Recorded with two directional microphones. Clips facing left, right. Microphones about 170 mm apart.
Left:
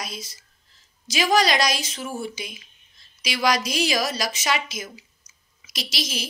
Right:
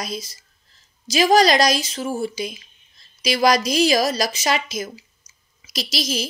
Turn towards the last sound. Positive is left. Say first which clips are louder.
# right 6 dB
turn(degrees=-40)  # may be behind; listen again after turning